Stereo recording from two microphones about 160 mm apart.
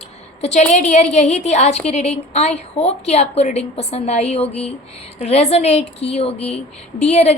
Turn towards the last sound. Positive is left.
turn(degrees=45)  # may be behind; listen again after turning